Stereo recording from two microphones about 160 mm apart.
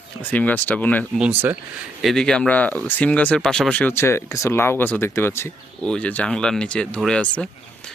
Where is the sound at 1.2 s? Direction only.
10° right (ahead or behind).